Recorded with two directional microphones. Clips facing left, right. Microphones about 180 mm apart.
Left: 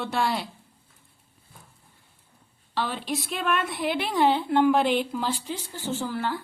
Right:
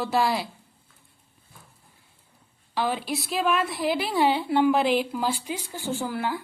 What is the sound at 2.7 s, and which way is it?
A woman's voice, 10° right (ahead or behind).